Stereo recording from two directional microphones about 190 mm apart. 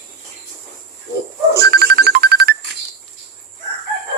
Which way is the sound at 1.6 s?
55° right (ahead or behind).